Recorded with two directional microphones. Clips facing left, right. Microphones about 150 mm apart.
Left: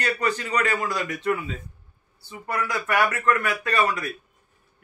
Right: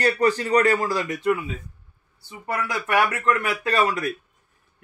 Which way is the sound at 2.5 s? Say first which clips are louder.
Right 1 dB; 25° right (ahead or behind).